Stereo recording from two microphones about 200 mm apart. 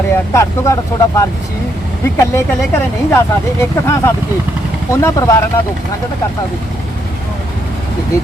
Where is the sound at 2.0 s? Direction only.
15° left (ahead or behind).